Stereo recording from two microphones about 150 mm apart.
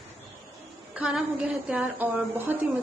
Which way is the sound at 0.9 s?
5° right (ahead or behind).